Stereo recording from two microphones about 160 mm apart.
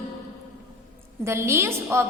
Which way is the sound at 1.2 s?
15° right (ahead or behind).